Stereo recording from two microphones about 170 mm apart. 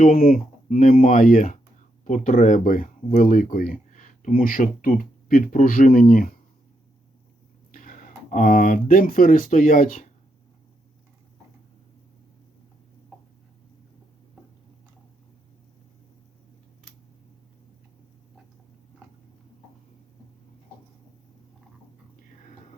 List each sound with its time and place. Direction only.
0.0 s speech: 55° left (ahead or behind)
7.7 s speech: 50° left (ahead or behind)